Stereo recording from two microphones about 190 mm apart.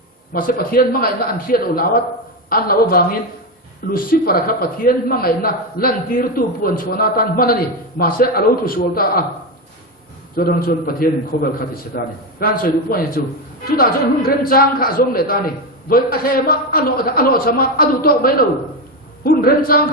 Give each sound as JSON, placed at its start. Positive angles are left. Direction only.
{"t": 0.3, "sound": "a man's voice", "side_deg": 50}
{"t": 10.3, "sound": "a man's voice", "side_deg": 50}